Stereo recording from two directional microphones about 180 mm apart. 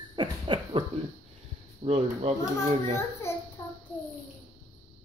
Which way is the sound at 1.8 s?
35° right (ahead or behind).